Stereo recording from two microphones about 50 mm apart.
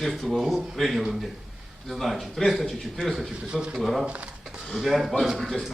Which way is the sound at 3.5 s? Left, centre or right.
Centre.